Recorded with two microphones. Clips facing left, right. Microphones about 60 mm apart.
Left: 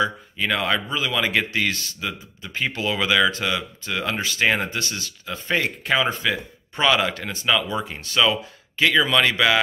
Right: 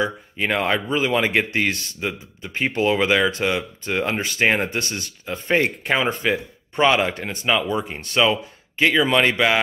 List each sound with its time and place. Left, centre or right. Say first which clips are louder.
0.0 s speech: even; right